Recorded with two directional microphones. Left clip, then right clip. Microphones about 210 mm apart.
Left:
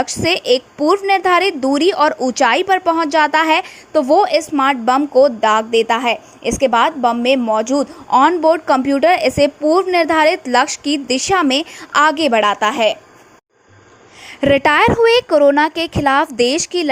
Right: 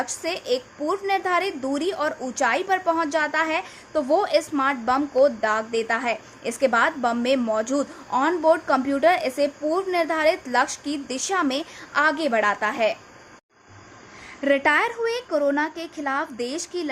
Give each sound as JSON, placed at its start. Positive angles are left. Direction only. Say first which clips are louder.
{"t": 0.0, "sound": "a woman's voice", "louder": "left 11 dB", "side_deg": 30}
{"t": 14.3, "sound": "a woman's voice", "louder": "left 7 dB", "side_deg": 35}